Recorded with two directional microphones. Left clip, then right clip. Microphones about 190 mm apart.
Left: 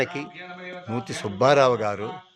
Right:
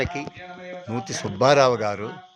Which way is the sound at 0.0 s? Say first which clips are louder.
Even; 5° left (ahead or behind).